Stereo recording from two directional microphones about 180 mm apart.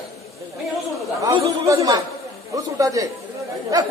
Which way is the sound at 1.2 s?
20° right (ahead or behind).